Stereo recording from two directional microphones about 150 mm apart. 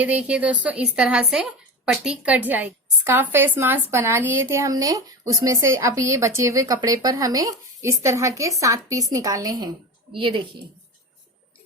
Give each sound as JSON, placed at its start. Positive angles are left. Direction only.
{"t": 0.0, "sound": "a woman's voice", "side_deg": -10}